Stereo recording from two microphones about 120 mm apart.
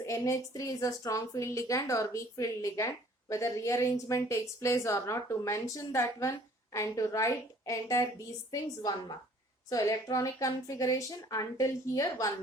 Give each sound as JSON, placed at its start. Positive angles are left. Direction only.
{"t": 0.0, "sound": "a woman's voice", "side_deg": 25}